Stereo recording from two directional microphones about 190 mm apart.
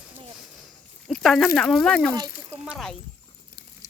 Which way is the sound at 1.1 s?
Centre (ahead or behind).